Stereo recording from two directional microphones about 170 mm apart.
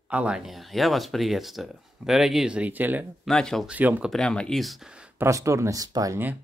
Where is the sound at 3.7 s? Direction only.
10° right (ahead or behind).